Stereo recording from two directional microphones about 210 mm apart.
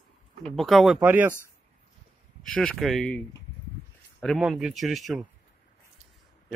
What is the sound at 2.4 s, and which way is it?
A man's voice, 5° left (ahead or behind).